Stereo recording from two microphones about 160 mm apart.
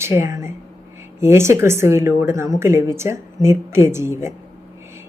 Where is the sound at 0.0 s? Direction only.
15° right (ahead or behind).